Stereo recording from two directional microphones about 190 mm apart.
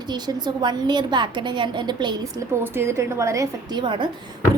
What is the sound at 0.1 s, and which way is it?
A woman's voice, 20° right (ahead or behind).